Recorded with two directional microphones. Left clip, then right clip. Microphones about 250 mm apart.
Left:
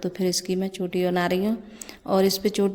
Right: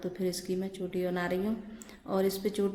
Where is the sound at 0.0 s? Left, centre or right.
Left.